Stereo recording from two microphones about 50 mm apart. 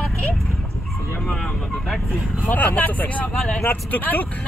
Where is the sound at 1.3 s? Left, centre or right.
Centre.